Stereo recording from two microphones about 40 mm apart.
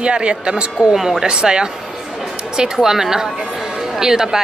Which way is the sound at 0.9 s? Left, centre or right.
Centre.